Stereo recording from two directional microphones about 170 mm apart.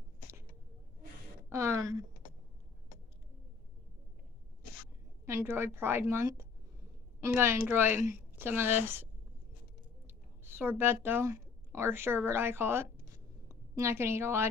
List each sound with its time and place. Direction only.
1.5 s speech: 15° right (ahead or behind)
5.2 s a woman's voice: 15° right (ahead or behind)
10.0 s a woman's voice: 10° right (ahead or behind)